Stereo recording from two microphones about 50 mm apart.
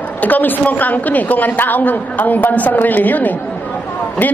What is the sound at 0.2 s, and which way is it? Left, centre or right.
A woman's voice, left.